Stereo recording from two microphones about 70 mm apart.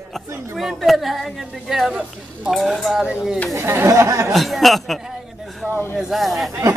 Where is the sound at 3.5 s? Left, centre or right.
Right.